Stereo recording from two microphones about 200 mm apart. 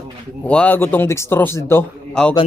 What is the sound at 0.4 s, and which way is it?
A man's voice, 5° left (ahead or behind).